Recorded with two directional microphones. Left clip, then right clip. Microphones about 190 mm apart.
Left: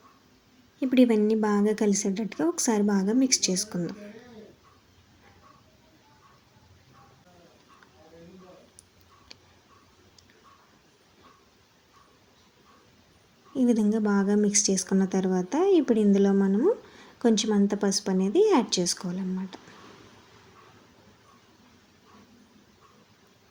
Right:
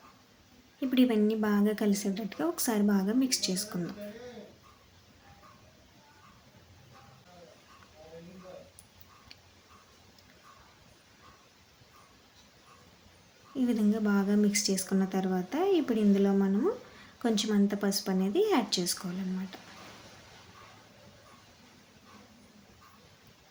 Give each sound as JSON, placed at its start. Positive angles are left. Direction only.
{"t": 0.8, "sound": "a woman's voice", "side_deg": 20}
{"t": 13.6, "sound": "a woman's voice", "side_deg": 20}